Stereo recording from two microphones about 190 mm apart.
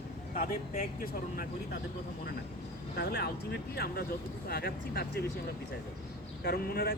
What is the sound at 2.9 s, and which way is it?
Speech, 60° left (ahead or behind).